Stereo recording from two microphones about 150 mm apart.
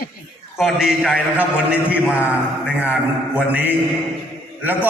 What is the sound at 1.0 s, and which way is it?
Speech, 10° left (ahead or behind).